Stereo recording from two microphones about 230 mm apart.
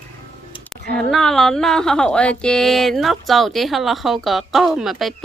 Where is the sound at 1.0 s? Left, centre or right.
Centre.